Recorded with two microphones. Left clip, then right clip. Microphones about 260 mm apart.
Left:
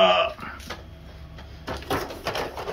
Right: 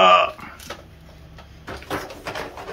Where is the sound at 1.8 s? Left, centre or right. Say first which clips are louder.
Left 1 dB; left.